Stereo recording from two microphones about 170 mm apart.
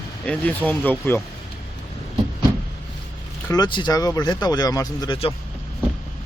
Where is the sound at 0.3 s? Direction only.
10° left (ahead or behind).